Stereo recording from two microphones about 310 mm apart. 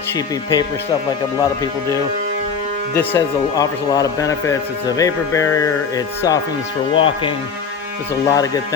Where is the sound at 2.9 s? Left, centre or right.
Centre.